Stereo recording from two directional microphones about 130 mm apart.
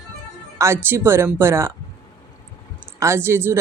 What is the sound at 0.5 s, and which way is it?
Speech, 20° right (ahead or behind).